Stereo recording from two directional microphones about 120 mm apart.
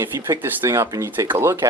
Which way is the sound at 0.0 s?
20° right (ahead or behind).